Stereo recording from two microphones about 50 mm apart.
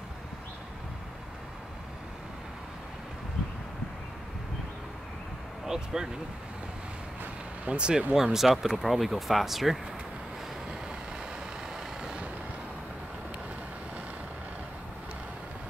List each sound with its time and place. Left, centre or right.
5.9 s speech: centre
7.6 s speech: centre
8.1 s speech: centre
11.7 s vehicle: centre